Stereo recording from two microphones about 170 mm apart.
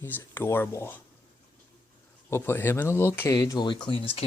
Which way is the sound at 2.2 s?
15° left (ahead or behind).